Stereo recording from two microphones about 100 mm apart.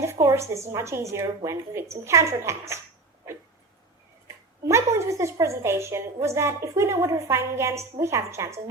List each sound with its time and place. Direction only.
0.0 s a woman's voice: 25° right (ahead or behind)
4.6 s a woman's voice: 30° right (ahead or behind)